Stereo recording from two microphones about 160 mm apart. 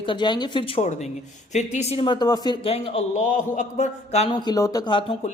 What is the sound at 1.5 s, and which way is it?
Speech, 45° left (ahead or behind).